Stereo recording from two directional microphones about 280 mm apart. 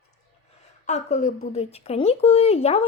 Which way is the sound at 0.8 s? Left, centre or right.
Left.